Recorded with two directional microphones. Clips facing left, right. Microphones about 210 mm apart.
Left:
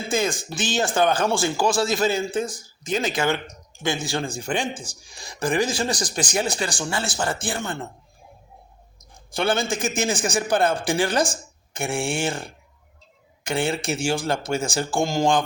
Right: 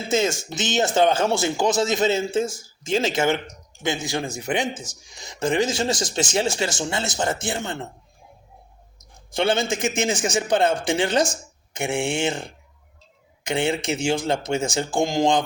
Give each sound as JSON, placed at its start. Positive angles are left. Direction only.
{"t": 0.1, "sound": "speech", "side_deg": -25}
{"t": 9.3, "sound": "speech", "side_deg": -25}